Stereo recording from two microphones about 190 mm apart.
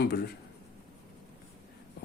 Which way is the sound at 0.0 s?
60° left (ahead or behind).